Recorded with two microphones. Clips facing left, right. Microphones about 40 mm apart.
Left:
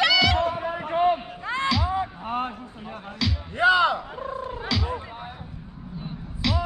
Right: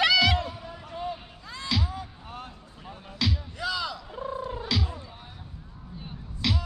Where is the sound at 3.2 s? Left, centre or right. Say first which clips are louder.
Left 1 dB; centre.